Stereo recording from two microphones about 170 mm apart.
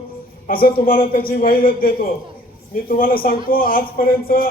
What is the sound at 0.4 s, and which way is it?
Speech, 60° left (ahead or behind).